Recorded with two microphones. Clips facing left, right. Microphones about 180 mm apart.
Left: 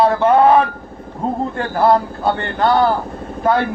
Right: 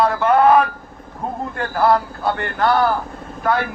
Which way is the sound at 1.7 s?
25° left (ahead or behind).